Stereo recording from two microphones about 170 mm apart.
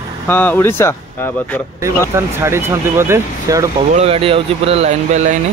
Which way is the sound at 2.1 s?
15° right (ahead or behind).